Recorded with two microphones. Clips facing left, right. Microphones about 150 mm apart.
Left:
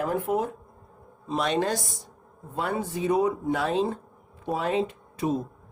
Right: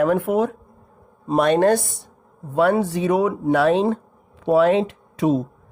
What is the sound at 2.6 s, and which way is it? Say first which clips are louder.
A woman's voice: right 10 dB; 75° right (ahead or behind).